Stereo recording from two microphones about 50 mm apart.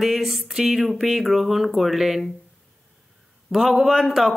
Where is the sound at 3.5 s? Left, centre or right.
Centre.